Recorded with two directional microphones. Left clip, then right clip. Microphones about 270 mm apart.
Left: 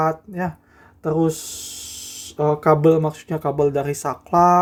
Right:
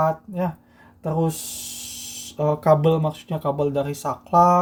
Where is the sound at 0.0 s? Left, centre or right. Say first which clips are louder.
Left 1 dB; left.